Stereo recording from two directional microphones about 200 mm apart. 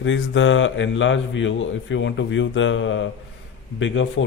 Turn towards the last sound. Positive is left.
turn(degrees=75)  # may be behind; listen again after turning